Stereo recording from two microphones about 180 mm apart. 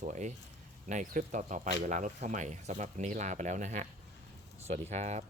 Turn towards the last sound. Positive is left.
turn(degrees=-40)  # may be behind; listen again after turning